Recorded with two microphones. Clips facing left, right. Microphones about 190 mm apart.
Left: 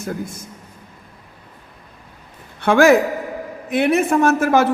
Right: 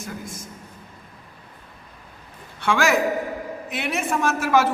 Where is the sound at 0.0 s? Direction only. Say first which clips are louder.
Left 7 dB; 60° left (ahead or behind).